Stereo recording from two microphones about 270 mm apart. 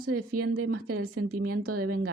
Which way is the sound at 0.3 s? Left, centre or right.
Right.